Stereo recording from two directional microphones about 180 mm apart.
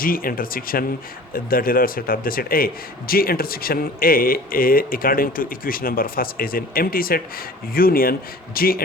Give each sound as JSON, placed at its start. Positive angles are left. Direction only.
{"t": 0.0, "sound": "speech", "side_deg": 50}